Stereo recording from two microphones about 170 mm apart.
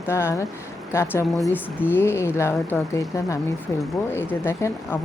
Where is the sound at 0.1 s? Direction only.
15° left (ahead or behind).